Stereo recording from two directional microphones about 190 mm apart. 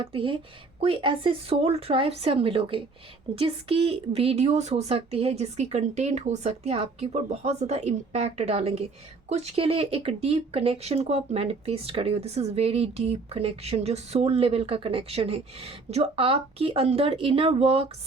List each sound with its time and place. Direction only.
0.0 s speech: 30° right (ahead or behind)